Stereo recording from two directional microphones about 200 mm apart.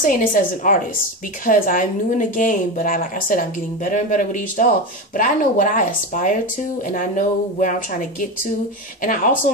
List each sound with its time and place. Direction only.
0.0 s a woman's voice: 45° left (ahead or behind)